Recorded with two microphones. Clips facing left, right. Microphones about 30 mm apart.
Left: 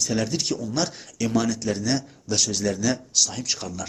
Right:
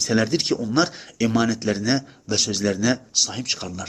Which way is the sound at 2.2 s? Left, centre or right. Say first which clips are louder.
Right 2 dB; centre.